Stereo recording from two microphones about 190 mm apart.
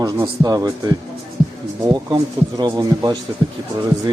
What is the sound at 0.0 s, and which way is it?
Speech, 20° right (ahead or behind).